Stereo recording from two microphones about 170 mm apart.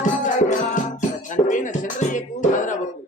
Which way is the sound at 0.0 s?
45° left (ahead or behind).